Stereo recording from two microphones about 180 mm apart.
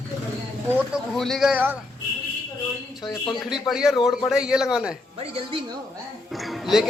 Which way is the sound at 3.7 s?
5° right (ahead or behind).